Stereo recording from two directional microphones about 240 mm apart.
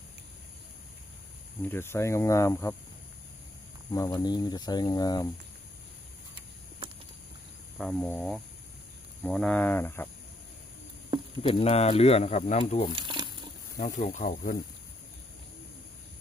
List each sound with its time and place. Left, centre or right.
1.6 s speech: centre
3.9 s speech: centre
7.8 s cricket: centre
9.2 s speech: centre
11.4 s speech: left
13.0 s crumpling: centre
13.7 s speech: left